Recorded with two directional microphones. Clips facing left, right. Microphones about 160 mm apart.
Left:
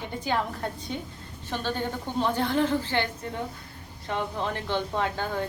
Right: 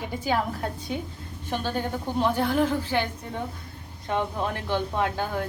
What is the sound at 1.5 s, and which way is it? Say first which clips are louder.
A woman's voice: right 2 dB; 10° right (ahead or behind).